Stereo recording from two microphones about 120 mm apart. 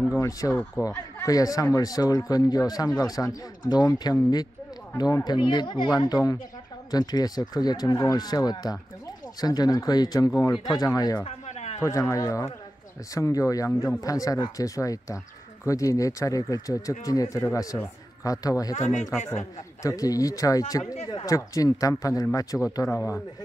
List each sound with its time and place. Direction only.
0.1 s speech: 25° left (ahead or behind)
11.2 s a sound: 65° left (ahead or behind)
11.8 s speech: 25° left (ahead or behind)
18.8 s speech: 80° left
19.8 s speech: 30° left (ahead or behind)